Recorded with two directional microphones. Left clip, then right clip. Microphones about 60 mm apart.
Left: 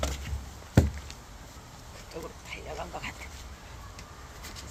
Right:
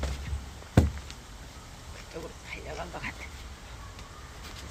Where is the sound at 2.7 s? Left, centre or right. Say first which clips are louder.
Even; right.